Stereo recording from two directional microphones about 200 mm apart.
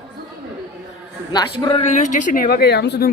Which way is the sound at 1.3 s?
20° left (ahead or behind).